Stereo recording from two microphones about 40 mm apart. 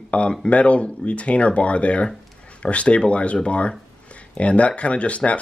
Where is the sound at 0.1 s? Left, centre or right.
Left.